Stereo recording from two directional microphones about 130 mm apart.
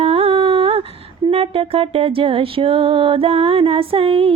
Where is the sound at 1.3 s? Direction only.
50° right (ahead or behind).